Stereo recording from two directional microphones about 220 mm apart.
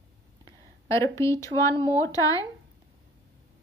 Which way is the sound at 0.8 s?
15° left (ahead or behind).